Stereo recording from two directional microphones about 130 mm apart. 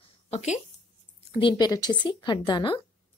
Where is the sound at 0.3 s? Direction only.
60° left (ahead or behind).